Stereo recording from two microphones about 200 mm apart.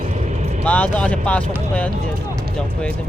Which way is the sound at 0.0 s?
35° right (ahead or behind).